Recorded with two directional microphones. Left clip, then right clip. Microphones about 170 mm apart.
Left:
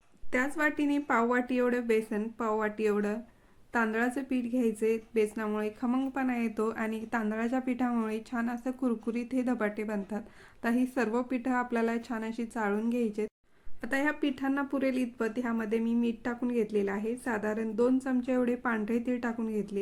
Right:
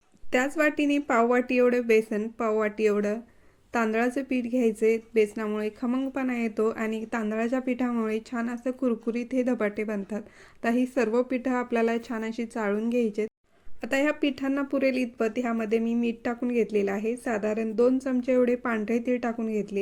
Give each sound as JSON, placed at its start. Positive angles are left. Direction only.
{"t": 0.3, "sound": "a woman's voice", "side_deg": -25}